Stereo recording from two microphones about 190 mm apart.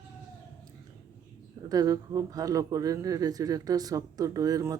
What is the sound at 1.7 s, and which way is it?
Speech, 20° right (ahead or behind).